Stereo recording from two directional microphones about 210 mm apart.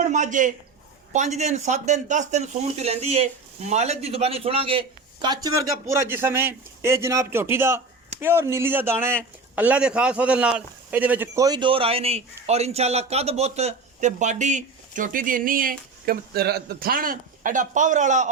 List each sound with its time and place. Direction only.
0.1 s a man's voice: 35° right (ahead or behind)